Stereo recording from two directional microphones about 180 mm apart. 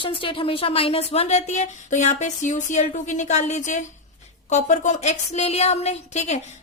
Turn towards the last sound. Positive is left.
turn(degrees=40)  # may be behind; listen again after turning